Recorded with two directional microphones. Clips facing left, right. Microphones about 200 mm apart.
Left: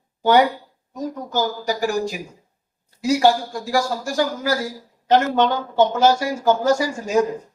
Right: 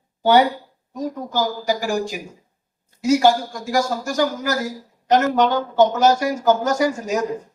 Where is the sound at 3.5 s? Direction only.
30° left (ahead or behind).